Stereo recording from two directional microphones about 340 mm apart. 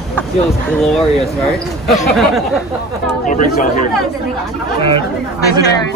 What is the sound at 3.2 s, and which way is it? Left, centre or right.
Speech, left.